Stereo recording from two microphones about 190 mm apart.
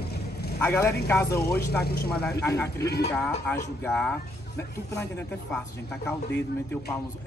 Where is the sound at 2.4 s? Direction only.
15° left (ahead or behind).